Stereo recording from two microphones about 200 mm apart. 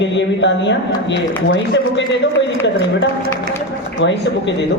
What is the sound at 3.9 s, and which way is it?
Speech, 65° left (ahead or behind).